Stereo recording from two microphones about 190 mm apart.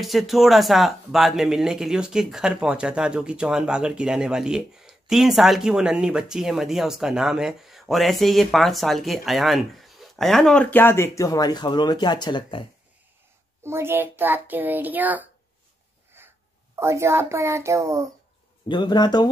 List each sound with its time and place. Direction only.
0.0 s speech: centre (ahead or behind); by 12.6 s 25° left (ahead or behind)
13.6 s a child's voice: 15° right (ahead or behind)
16.1 s wheeze: 10° right (ahead or behind)
16.8 s a child's voice: 15° right (ahead or behind)
18.7 s speech: 25° left (ahead or behind)